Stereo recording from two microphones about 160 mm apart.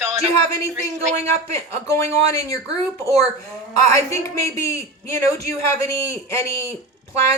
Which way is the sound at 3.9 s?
20° left (ahead or behind).